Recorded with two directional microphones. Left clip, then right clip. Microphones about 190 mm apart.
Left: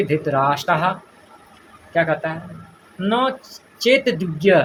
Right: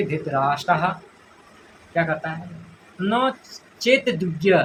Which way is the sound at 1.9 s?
50° left (ahead or behind).